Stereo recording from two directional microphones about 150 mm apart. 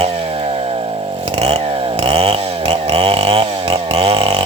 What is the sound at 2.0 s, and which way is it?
Chainsaw, 40° right (ahead or behind).